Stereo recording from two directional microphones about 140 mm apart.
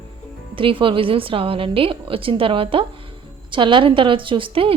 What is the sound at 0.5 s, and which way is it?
A woman's voice, 40° right (ahead or behind).